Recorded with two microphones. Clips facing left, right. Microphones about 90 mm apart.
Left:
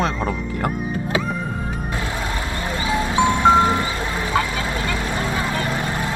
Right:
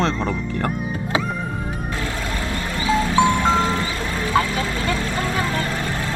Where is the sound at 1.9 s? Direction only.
20° left (ahead or behind).